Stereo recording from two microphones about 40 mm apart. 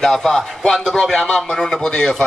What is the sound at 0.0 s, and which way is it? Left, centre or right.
A man's voice, centre.